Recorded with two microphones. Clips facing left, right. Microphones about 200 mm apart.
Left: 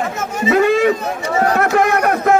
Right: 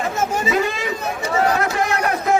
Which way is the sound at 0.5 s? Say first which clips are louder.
Left 8 dB; 60° left (ahead or behind).